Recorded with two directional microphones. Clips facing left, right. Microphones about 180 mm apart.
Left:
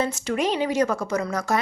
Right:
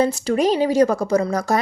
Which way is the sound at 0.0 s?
35° right (ahead or behind).